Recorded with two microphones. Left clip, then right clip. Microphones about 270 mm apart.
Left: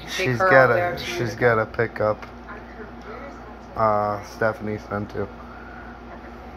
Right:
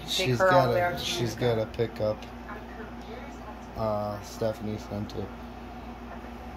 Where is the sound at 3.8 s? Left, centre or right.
Left.